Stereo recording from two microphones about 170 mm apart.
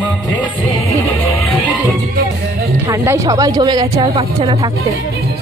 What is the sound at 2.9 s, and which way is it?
Speech, 20° right (ahead or behind).